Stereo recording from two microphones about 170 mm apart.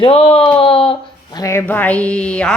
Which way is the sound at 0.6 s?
35° left (ahead or behind).